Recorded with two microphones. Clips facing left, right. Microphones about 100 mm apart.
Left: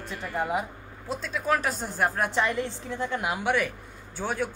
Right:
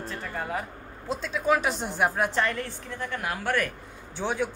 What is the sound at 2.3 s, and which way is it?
A woman's voice, 15° left (ahead or behind).